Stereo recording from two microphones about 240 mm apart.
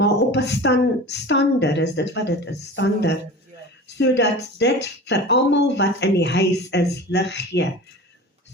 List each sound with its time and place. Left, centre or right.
0.0 s speech: left